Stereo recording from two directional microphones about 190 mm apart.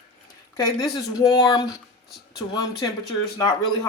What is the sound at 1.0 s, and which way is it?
Speech, 20° left (ahead or behind).